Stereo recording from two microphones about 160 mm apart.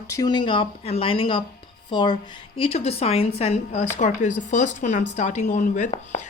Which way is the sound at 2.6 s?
40° left (ahead or behind).